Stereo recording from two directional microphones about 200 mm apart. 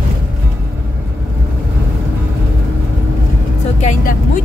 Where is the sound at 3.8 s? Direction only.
40° left (ahead or behind).